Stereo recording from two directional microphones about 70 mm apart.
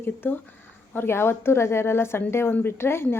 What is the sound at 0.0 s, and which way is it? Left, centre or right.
A woman's voice, left.